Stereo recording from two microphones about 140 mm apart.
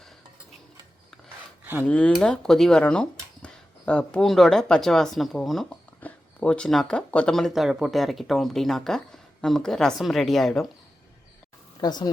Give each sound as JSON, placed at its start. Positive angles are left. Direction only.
{"t": 1.8, "sound": "speech", "side_deg": 10}
{"t": 11.8, "sound": "speech", "side_deg": 30}